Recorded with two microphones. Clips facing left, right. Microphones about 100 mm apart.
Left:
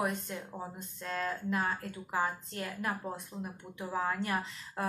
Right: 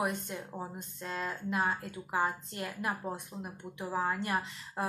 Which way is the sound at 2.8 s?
10° right (ahead or behind).